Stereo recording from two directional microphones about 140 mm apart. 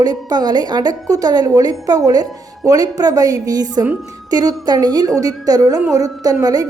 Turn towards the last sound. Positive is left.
turn(degrees=-25)  # may be behind; listen again after turning